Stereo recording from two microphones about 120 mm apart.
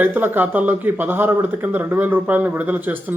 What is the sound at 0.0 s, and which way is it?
A man's voice, 15° right (ahead or behind).